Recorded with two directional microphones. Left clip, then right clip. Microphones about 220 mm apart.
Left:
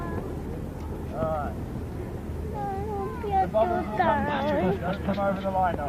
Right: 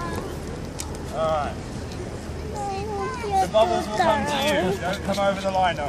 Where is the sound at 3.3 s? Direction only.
15° right (ahead or behind).